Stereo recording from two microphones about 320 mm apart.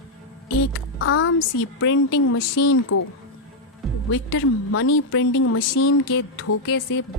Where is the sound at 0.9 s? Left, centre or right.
Left.